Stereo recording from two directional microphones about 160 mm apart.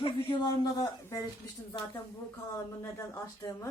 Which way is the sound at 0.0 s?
30° left (ahead or behind).